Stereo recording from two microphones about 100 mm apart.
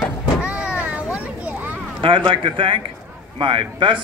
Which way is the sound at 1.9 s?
60° right (ahead or behind).